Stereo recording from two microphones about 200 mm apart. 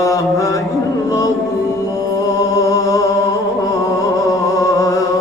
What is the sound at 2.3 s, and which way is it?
Music, 15° left (ahead or behind).